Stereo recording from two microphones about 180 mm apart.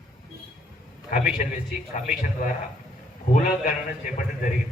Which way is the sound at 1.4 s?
45° left (ahead or behind).